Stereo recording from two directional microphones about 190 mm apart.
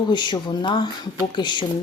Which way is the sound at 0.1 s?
25° left (ahead or behind).